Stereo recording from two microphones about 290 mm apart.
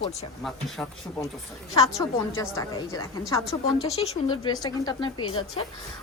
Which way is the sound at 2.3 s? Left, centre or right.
Centre.